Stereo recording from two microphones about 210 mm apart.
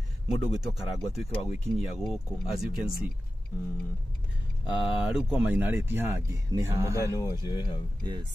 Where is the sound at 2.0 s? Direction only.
Centre (ahead or behind).